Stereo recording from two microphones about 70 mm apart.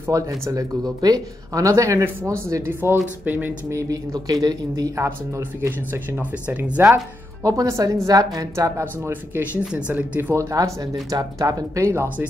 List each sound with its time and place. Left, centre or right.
0.1 s speech: right
3.7 s speech: right
4.9 s speech: right
5.4 s speech: right
7.4 s speech: right
8.5 s speech: right
9.1 s speech: right
10.3 s speech: right